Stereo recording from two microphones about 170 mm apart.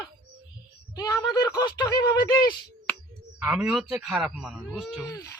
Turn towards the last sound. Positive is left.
turn(degrees=-5)  # may be behind; listen again after turning